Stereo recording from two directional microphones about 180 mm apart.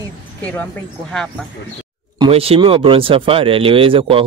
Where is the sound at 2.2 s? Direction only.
30° right (ahead or behind).